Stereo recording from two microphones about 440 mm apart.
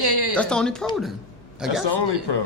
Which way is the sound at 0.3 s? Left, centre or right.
Centre.